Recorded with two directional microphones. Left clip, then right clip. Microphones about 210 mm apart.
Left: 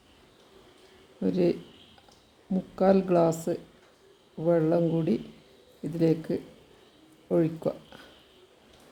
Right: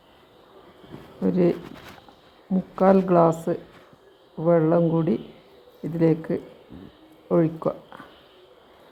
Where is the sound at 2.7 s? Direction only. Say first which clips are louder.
Right 5 dB; centre (ahead or behind).